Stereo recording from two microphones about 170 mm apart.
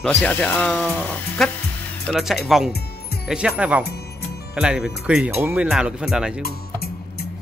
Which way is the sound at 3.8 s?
70° left (ahead or behind).